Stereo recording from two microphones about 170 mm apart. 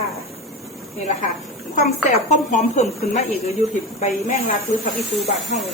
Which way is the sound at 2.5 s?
45° left (ahead or behind).